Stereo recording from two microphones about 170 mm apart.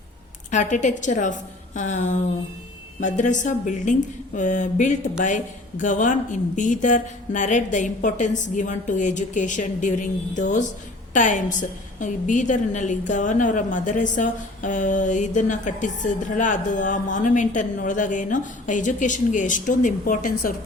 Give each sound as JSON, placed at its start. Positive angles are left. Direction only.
{"t": 0.5, "sound": "a woman's voice", "side_deg": 45}